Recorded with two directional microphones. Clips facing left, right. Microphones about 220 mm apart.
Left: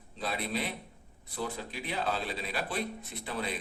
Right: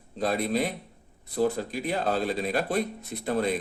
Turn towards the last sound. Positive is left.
turn(degrees=-45)  # may be behind; listen again after turning